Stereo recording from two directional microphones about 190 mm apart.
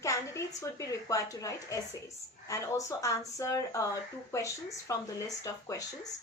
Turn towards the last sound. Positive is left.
turn(degrees=15)  # may be behind; listen again after turning